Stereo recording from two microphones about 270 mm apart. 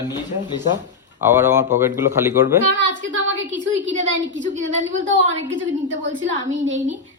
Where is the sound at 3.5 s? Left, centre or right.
Right.